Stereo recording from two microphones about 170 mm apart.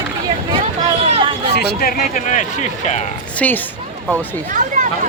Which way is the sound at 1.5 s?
60° left (ahead or behind).